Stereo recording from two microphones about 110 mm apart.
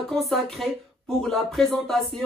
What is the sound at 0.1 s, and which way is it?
Speech, centre (ahead or behind).